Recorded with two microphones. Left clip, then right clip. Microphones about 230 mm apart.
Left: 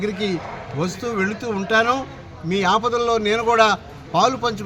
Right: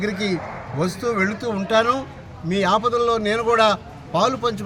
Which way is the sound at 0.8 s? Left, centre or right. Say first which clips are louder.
Right 2 dB; centre.